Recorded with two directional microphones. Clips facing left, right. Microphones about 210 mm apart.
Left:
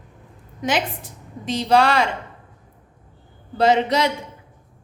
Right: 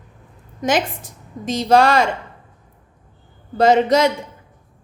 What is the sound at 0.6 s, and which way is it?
A woman's voice, 45° right (ahead or behind).